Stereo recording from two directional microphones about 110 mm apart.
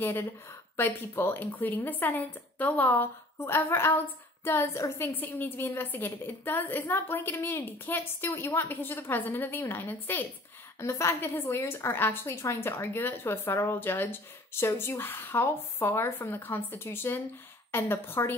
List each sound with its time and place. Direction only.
0.0 s a woman's voice: 20° left (ahead or behind)